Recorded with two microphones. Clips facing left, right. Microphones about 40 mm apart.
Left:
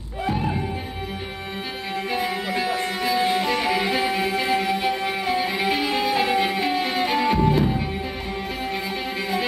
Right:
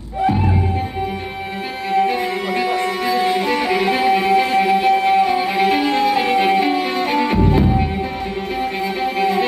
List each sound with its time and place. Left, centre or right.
2.8 s music: centre
5.6 s music: centre
5.9 s music: centre
6.7 s music: centre
8.8 s music: centre